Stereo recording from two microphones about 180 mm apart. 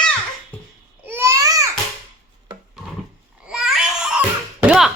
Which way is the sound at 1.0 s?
15° right (ahead or behind).